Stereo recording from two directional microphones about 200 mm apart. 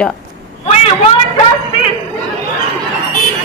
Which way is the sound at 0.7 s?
30° left (ahead or behind).